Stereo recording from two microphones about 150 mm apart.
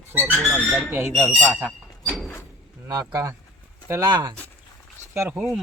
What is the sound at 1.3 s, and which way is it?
Speech, 10° right (ahead or behind).